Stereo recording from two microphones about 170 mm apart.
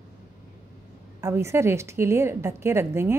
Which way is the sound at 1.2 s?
15° right (ahead or behind).